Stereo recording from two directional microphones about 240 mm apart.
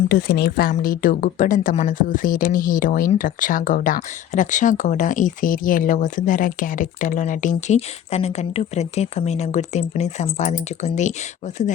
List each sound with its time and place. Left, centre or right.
0.1 s speech: left